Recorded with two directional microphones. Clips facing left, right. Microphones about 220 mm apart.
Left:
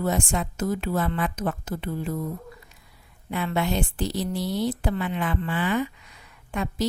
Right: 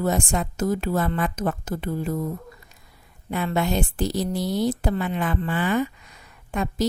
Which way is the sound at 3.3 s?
45° right (ahead or behind).